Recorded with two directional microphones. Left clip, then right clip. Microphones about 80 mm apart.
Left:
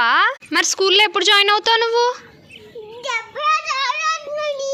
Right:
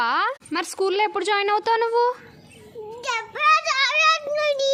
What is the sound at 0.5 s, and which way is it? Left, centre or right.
Speech, centre.